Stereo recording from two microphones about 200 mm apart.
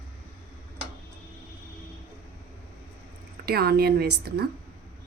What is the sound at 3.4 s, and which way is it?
A woman's voice, 50° right (ahead or behind).